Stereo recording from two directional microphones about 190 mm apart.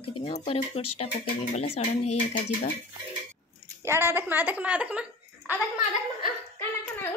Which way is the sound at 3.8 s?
15° right (ahead or behind).